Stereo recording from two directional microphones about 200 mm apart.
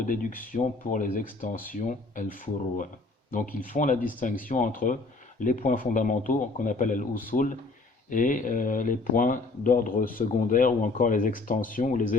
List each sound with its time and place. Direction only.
0.0 s speech: 40° left (ahead or behind)
3.3 s speech: 45° left (ahead or behind)